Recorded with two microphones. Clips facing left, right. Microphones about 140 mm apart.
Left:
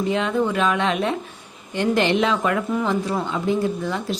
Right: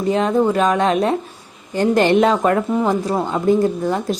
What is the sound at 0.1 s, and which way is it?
A woman's voice, 40° right (ahead or behind).